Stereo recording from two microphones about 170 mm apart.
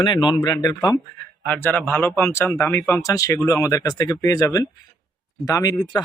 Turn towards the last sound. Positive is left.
turn(degrees=25)  # may be behind; listen again after turning